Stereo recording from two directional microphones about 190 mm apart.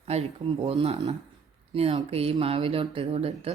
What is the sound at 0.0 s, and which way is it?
Speech, 35° right (ahead or behind).